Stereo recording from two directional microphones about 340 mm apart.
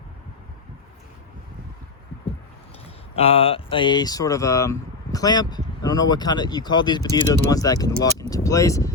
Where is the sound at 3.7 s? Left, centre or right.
Centre.